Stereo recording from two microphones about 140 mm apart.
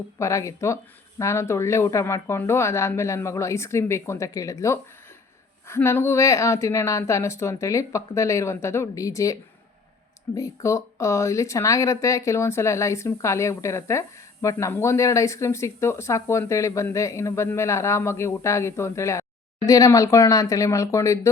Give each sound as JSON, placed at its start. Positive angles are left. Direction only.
{"t": 0.2, "sound": "speech", "side_deg": 20}